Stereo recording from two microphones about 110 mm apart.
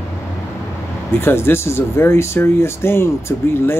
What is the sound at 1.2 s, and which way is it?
Speech, 20° left (ahead or behind).